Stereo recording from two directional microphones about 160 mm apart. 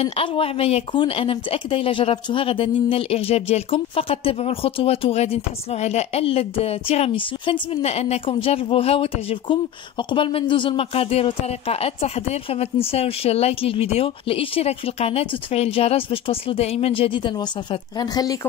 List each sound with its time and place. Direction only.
0.0 s speech: 35° left (ahead or behind)